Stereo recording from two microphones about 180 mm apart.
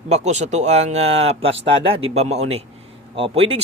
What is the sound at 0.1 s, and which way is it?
Speech, 40° right (ahead or behind).